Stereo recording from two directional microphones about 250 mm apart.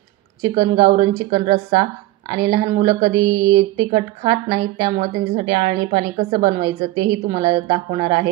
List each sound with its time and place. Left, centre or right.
0.8 s a woman's voice: right